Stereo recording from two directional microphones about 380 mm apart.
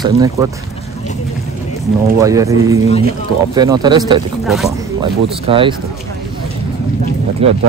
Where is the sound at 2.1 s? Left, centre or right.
Centre.